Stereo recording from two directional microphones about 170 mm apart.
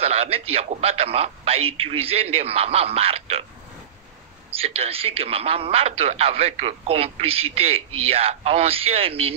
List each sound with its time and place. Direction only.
0.0 s speech: 35° right (ahead or behind)
4.5 s speech: 35° right (ahead or behind)